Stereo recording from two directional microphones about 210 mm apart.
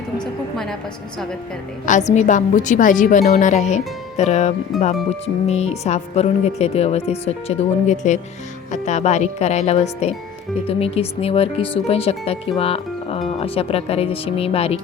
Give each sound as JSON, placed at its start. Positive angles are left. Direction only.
{"t": 0.5, "sound": "a woman's voice", "side_deg": 0}
{"t": 1.9, "sound": "speech", "side_deg": 35}